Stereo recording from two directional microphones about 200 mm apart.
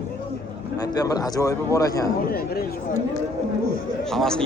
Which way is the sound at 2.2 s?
50° left (ahead or behind).